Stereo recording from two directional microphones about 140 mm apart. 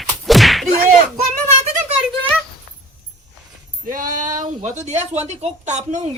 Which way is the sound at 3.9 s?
75° right (ahead or behind).